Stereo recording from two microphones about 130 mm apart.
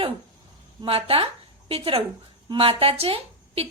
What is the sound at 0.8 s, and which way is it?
A woman's voice, 45° right (ahead or behind).